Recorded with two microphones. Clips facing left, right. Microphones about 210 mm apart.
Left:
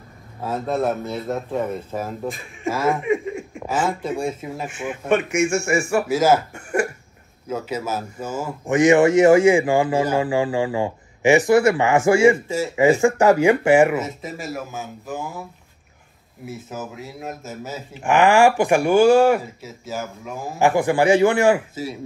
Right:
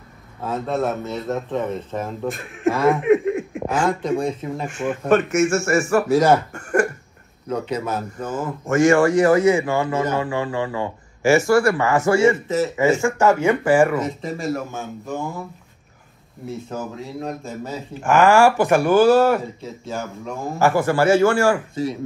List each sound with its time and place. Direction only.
0.4 s a man's voice: 10° left (ahead or behind); by 10.6 s 30° left (ahead or behind)
10.8 s speech: 20° left (ahead or behind)
12.6 s a man's voice: 15° left (ahead or behind)
13.2 s speech: 35° left (ahead or behind)
13.9 s speech: 5° left (ahead or behind)
16.4 s speech: centre (ahead or behind)
18.0 s a man's voice: 15° left (ahead or behind)
20.5 s a man's voice: 15° left (ahead or behind)